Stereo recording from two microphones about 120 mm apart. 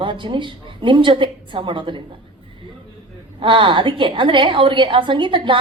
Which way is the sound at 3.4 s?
45° right (ahead or behind).